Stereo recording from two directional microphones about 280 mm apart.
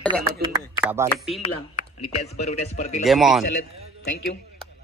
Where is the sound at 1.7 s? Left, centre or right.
Left.